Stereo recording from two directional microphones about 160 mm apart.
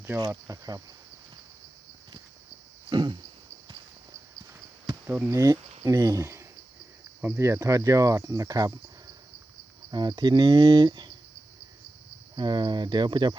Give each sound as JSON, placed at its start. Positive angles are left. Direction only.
{"t": 0.0, "sound": "speech", "side_deg": -15}
{"t": 2.9, "sound": "speech", "side_deg": -25}
{"t": 5.0, "sound": "speech", "side_deg": -10}
{"t": 5.8, "sound": "speech", "side_deg": -20}
{"t": 9.9, "sound": "speech", "side_deg": -25}
{"t": 12.4, "sound": "speech", "side_deg": -30}